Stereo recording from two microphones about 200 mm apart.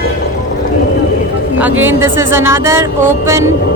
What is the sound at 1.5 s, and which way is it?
Speech, 10° right (ahead or behind).